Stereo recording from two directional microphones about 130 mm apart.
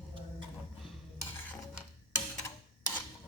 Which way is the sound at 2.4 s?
30° left (ahead or behind).